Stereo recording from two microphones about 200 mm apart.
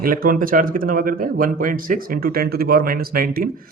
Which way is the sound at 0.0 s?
45° right (ahead or behind).